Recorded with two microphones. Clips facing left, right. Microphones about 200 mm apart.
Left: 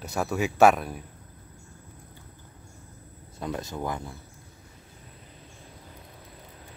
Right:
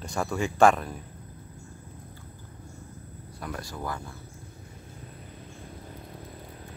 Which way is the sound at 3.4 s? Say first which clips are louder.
Left 4 dB; 20° left (ahead or behind).